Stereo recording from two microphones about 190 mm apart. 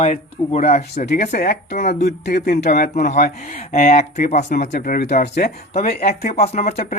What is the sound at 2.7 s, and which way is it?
Speech, 40° left (ahead or behind).